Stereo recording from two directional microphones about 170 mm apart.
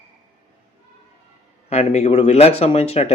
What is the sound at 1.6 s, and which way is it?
Speech, 40° left (ahead or behind).